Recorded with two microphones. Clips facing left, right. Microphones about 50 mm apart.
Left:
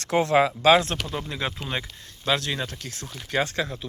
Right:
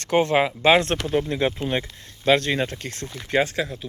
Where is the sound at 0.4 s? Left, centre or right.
Centre.